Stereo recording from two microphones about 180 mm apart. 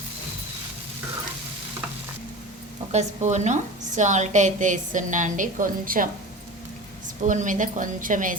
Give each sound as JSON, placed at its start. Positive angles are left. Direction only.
{"t": 2.9, "sound": "a woman's voice", "side_deg": -40}
{"t": 7.2, "sound": "a woman's voice", "side_deg": -45}